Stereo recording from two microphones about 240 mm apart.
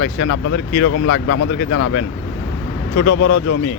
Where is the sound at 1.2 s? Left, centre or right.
Left.